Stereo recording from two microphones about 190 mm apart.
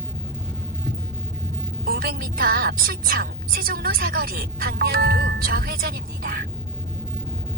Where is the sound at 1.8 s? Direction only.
50° right (ahead or behind).